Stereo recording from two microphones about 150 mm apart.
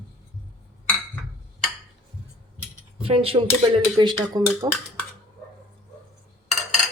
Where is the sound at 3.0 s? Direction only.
40° right (ahead or behind).